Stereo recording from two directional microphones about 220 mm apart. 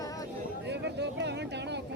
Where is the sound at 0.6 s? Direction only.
50° right (ahead or behind).